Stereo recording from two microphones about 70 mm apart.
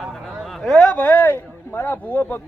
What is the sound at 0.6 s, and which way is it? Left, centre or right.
Speech, centre.